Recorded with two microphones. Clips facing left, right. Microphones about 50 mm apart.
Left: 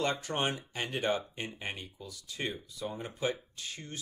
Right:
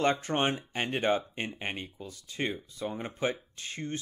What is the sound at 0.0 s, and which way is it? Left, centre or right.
Speech, right.